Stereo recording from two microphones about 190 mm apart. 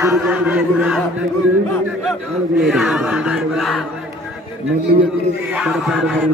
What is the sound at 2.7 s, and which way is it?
Chant, 5° right (ahead or behind).